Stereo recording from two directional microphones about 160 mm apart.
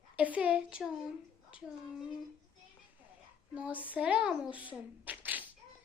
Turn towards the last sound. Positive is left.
turn(degrees=-10)  # may be behind; listen again after turning